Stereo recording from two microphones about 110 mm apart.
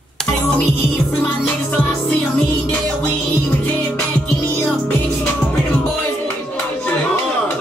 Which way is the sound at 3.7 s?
15° left (ahead or behind).